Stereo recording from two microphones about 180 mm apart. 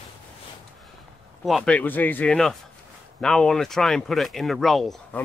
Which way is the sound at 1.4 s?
Centre (ahead or behind).